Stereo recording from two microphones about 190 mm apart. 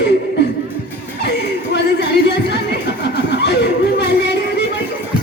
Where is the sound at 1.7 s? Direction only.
65° left (ahead or behind).